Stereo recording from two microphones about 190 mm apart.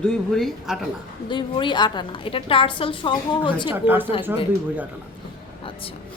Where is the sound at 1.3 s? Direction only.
25° left (ahead or behind).